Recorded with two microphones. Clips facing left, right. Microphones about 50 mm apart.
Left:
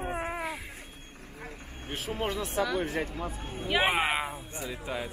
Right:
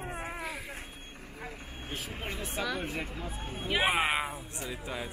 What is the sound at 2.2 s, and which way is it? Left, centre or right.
Speech, left.